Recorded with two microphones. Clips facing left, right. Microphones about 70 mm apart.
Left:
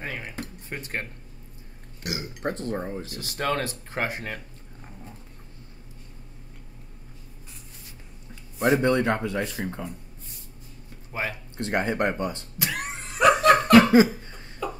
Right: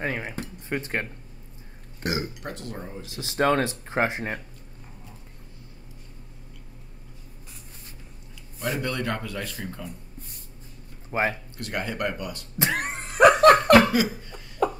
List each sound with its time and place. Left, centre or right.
0.0 s speech: right
2.0 s speech: right
2.4 s speech: left
3.1 s speech: right
8.5 s a man's voice: left
11.1 s speech: right
11.5 s a man's voice: left
12.5 s a sound: right
12.8 s car: right
13.4 s laughter: right
13.9 s laughter: left
14.6 s a sound: right